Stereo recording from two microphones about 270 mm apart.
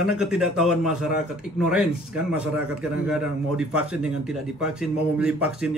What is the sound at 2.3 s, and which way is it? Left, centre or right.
A man's voice, centre.